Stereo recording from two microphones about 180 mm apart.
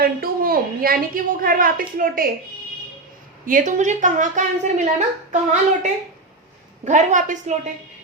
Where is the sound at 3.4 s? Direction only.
45° right (ahead or behind).